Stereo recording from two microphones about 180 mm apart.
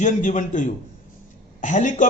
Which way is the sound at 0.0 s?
45° left (ahead or behind).